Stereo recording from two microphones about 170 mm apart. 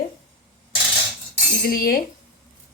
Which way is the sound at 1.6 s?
60° left (ahead or behind).